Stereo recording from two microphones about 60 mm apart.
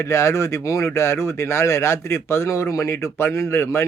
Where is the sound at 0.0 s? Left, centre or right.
Left.